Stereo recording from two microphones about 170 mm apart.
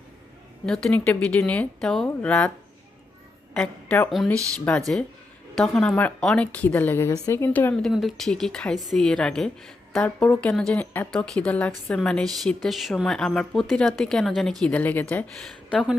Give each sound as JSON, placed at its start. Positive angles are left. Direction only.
{"t": 0.6, "sound": "a woman's voice", "side_deg": 5}
{"t": 3.5, "sound": "a woman's voice", "side_deg": 10}
{"t": 4.1, "sound": "a woman's voice", "side_deg": 0}